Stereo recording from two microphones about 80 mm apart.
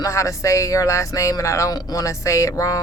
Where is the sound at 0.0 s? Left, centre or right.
Left.